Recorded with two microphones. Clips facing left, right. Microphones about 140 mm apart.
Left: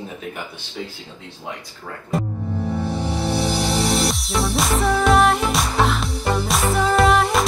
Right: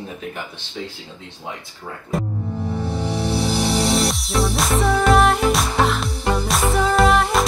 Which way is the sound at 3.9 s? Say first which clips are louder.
Right 1 dB; centre (ahead or behind).